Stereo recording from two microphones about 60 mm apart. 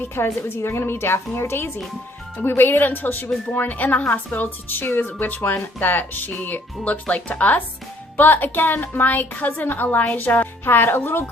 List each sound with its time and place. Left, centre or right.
0.4 s a woman's voice: left